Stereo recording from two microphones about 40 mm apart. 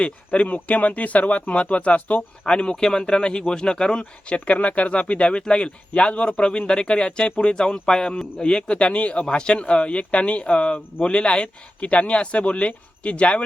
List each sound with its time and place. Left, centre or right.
0.0 s speech: left
2.4 s speech: left
4.3 s speech: left